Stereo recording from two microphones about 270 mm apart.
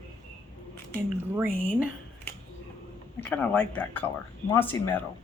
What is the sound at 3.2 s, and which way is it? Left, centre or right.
Speech, centre.